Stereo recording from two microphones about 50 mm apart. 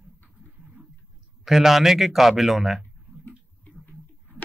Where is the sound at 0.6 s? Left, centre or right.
Right.